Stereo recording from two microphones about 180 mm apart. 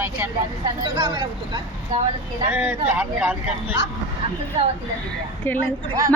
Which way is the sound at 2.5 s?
10° right (ahead or behind).